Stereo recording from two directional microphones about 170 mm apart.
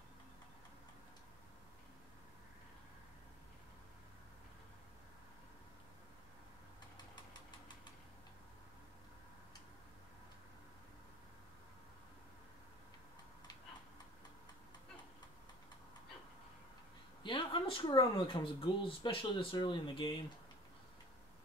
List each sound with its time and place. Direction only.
17.2 s speech: 30° left (ahead or behind)